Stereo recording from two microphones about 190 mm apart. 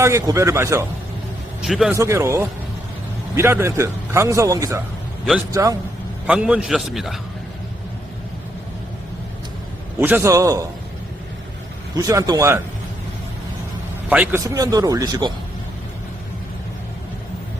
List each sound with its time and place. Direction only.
0.0 s a man's voice: 15° right (ahead or behind)
1.6 s a man's voice: centre (ahead or behind)
2.0 s a man's voice: 15° right (ahead or behind)
6.2 s a man's voice: 5° right (ahead or behind)
10.0 s a man's voice: 10° right (ahead or behind)
11.9 s a man's voice: 15° right (ahead or behind)
14.1 s a man's voice: 5° right (ahead or behind)
14.4 s speech: 20° right (ahead or behind)